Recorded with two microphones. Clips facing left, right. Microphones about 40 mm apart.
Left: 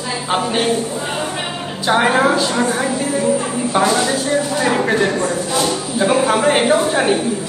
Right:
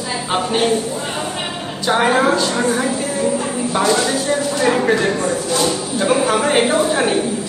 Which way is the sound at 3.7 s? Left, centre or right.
Left.